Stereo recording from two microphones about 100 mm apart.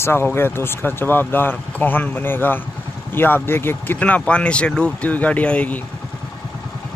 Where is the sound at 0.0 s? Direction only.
25° left (ahead or behind).